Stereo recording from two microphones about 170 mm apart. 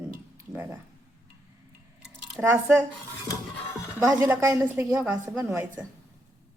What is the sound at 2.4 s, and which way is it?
Speech, 10° right (ahead or behind).